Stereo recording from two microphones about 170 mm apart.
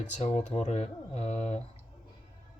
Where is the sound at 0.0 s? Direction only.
45° left (ahead or behind).